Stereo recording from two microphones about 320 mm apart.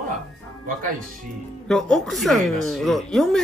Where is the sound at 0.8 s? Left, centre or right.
Right.